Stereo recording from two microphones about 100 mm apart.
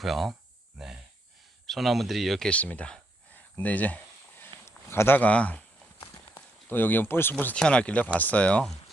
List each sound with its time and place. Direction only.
0.0 s speech: centre (ahead or behind)
2.5 s speech: 15° left (ahead or behind)
3.6 s a sound: 15° left (ahead or behind)
4.6 s walk: 25° left (ahead or behind)
6.7 s speech: 20° left (ahead or behind)